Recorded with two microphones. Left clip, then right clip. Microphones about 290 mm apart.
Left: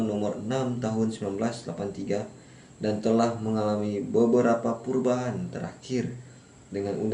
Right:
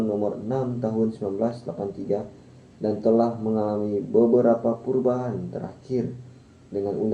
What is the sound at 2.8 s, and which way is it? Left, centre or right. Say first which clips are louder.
A man's voice: right 4 dB; left.